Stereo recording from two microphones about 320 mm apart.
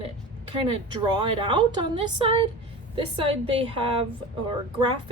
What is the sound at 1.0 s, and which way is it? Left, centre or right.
A woman's voice, centre.